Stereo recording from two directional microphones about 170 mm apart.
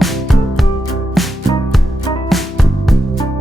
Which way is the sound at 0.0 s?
Centre (ahead or behind).